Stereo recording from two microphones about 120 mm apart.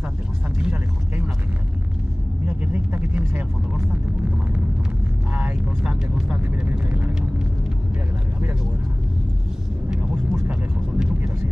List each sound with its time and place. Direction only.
0.6 s vehicle: 10° right (ahead or behind)
2.4 s vehicle: 15° right (ahead or behind)
5.3 s speech: 10° right (ahead or behind)
10.1 s vehicle: 15° right (ahead or behind)